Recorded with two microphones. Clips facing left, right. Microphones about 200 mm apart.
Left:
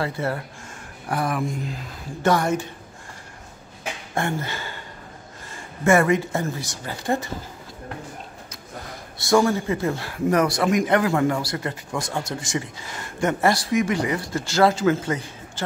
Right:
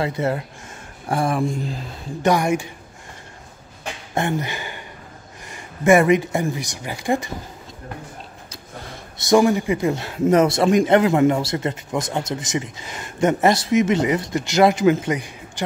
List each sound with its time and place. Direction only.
0.0 s a man's voice: 20° right (ahead or behind)
2.2 s speech: 15° right (ahead or behind)
4.1 s speech: 20° right (ahead or behind)
9.2 s a man's voice: 20° right (ahead or behind)